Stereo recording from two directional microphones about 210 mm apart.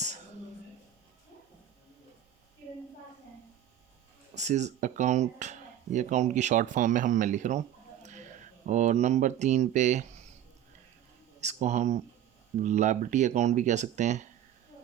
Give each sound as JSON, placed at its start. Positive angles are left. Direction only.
{"t": 4.4, "sound": "speech", "side_deg": -35}
{"t": 11.3, "sound": "speech", "side_deg": -35}